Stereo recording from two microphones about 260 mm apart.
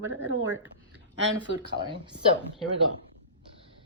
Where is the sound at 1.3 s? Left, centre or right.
Centre.